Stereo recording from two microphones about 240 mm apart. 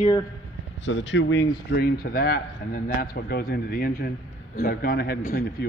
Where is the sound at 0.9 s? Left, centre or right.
Left.